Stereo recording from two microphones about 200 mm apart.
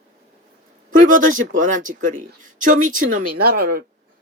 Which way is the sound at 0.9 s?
40° right (ahead or behind).